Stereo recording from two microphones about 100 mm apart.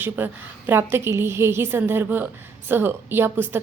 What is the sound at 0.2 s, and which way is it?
A woman's voice, 20° right (ahead or behind).